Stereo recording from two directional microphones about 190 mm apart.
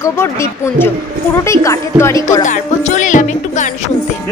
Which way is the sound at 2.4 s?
40° left (ahead or behind).